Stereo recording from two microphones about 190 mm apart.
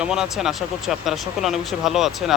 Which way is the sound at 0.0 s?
5° right (ahead or behind).